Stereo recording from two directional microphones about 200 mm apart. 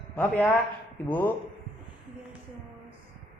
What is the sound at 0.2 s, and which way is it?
A man's voice, 5° left (ahead or behind).